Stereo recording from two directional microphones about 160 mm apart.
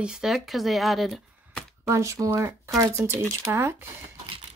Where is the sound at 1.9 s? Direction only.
20° right (ahead or behind).